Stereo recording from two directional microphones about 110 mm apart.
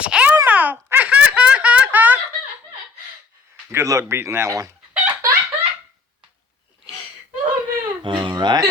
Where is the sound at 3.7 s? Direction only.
25° right (ahead or behind).